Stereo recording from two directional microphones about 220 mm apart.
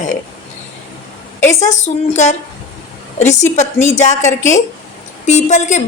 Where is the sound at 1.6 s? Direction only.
30° left (ahead or behind).